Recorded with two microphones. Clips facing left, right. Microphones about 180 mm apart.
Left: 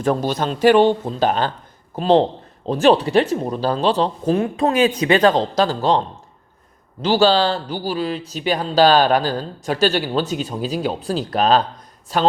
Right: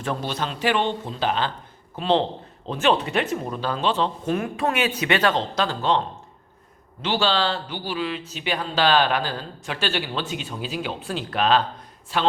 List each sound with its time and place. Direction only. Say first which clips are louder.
0.0 s a man's voice: left 8 dB; 40° left (ahead or behind)
7.0 s speech: left 7 dB; 40° left (ahead or behind)